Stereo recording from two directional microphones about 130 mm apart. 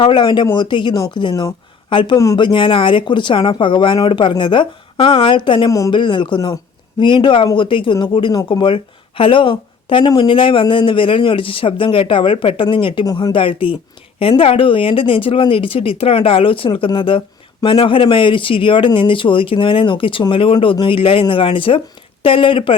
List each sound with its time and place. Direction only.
0.0 s speech: 35° left (ahead or behind)
2.1 s speech: 25° left (ahead or behind)
5.9 s speech: 40° left (ahead or behind)
13.1 s speech: 30° left (ahead or behind)
13.3 s speech: 40° left (ahead or behind)